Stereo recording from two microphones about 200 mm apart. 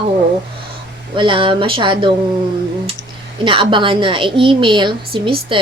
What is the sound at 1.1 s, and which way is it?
Speech, 25° right (ahead or behind).